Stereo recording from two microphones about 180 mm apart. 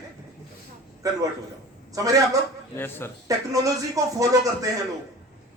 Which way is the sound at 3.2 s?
20° right (ahead or behind).